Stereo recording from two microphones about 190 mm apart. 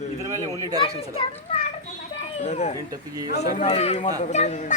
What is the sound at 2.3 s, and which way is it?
Speech, 35° left (ahead or behind).